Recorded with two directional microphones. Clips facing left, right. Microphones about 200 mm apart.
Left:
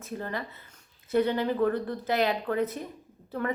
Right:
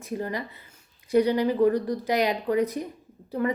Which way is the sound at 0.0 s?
15° right (ahead or behind).